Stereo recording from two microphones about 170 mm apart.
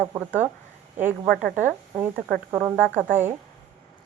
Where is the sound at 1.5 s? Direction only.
10° right (ahead or behind).